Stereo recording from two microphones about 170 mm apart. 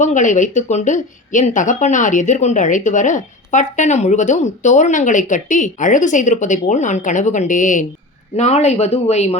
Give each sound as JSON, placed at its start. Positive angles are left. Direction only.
{"t": 0.0, "sound": "speech", "side_deg": 45}